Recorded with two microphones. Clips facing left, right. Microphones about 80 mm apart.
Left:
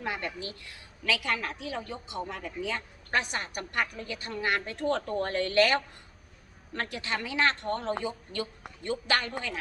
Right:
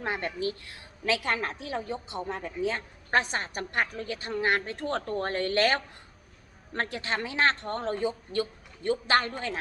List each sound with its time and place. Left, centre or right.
0.0 s a woman's voice: right